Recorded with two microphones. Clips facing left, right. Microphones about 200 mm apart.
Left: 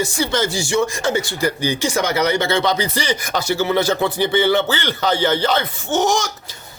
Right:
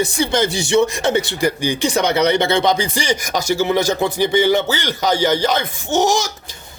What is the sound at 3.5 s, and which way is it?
Speech, 15° right (ahead or behind).